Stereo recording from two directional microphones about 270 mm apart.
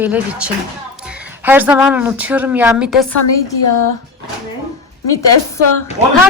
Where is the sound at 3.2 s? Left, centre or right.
Left.